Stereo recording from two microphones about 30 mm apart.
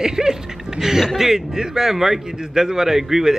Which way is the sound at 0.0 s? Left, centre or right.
Centre.